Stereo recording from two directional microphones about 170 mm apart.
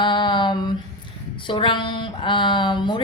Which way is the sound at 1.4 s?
30° left (ahead or behind).